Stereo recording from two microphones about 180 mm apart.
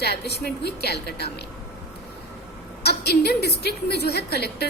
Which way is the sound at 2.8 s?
60° left (ahead or behind).